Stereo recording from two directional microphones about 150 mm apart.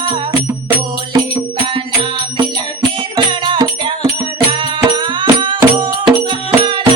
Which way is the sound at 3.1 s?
30° right (ahead or behind).